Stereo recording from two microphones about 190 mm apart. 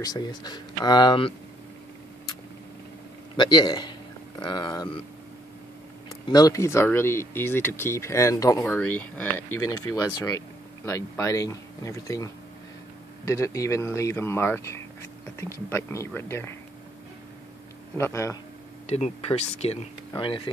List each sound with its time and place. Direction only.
0.0 s speech: 20° left (ahead or behind)
3.3 s speech: 20° left (ahead or behind)
6.0 s speech: 20° left (ahead or behind)
17.9 s speech: 15° left (ahead or behind)
18.9 s speech: 35° left (ahead or behind)